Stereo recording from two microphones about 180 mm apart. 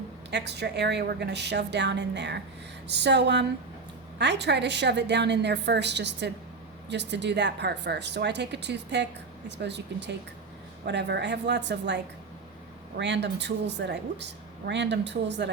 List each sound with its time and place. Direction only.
0.3 s speech: 70° right (ahead or behind)
13.0 s speech: 75° right (ahead or behind)